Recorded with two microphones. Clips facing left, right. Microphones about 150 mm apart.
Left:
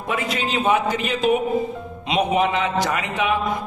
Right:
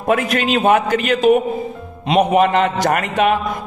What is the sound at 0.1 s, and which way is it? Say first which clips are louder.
A man's voice: right 7 dB; 65° right (ahead or behind).